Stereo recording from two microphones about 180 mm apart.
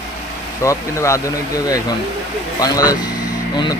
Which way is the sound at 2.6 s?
20° left (ahead or behind).